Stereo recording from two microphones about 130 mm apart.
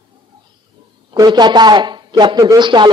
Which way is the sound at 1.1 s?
35° right (ahead or behind).